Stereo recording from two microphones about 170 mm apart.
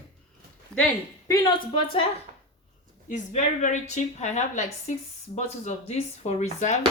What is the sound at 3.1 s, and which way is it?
A woman's voice, 45° left (ahead or behind).